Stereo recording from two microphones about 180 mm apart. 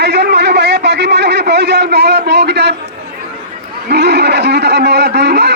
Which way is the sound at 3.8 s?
70° right (ahead or behind).